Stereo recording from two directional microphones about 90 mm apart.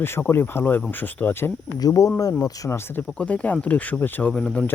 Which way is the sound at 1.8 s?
40° left (ahead or behind).